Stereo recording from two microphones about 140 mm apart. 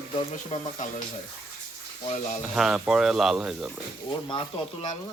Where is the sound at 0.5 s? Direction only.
60° left (ahead or behind).